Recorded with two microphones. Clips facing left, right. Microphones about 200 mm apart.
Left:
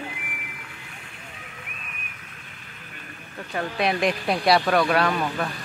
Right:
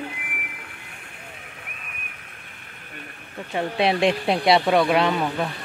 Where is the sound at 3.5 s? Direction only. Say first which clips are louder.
Right 3 dB; 25° right (ahead or behind).